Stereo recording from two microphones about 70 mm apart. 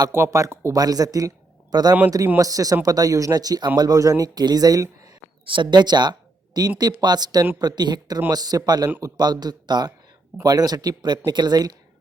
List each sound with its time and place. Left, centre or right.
0.1 s speech: right
0.7 s speech: right
1.7 s speech: right
2.4 s speech: right
5.7 s speech: right
7.6 s speech: right
8.3 s speech: right
10.4 s speech: right